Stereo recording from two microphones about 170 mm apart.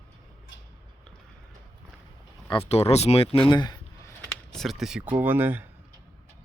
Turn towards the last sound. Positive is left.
turn(degrees=-10)  # may be behind; listen again after turning